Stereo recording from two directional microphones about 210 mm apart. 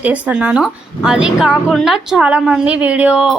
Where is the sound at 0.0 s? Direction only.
5° right (ahead or behind).